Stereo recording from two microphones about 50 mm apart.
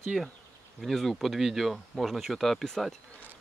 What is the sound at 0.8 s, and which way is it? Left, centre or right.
Speech, centre.